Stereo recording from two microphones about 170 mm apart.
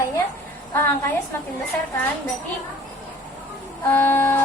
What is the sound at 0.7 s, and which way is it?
Speech, 15° left (ahead or behind).